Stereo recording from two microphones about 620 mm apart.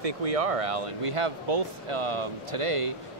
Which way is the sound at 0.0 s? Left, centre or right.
Right.